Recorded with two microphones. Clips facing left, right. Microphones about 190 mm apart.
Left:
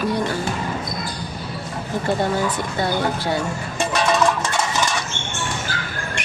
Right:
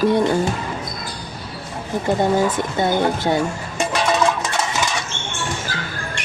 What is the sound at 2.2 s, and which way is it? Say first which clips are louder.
Speech: right 4 dB; 20° right (ahead or behind).